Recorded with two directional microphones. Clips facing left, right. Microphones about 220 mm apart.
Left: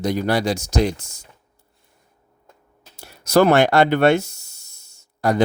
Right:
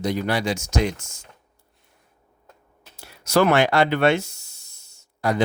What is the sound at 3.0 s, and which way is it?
Speech, 40° left (ahead or behind).